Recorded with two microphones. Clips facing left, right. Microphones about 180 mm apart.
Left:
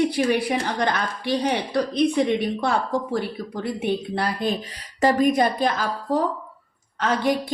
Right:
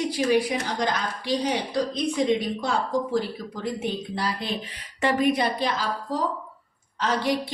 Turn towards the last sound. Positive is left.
turn(degrees=50)  # may be behind; listen again after turning